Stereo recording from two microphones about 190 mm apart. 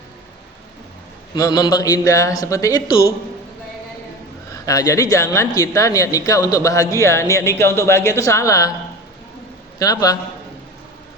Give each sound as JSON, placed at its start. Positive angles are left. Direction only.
{"t": 1.4, "sound": "a man's voice", "side_deg": 20}
{"t": 4.6, "sound": "speech", "side_deg": 20}
{"t": 9.7, "sound": "a man's voice", "side_deg": 20}